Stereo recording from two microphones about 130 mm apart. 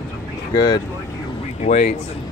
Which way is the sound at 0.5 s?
35° left (ahead or behind).